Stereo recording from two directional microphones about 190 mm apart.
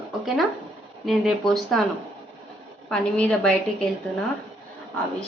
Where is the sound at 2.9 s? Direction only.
5° left (ahead or behind).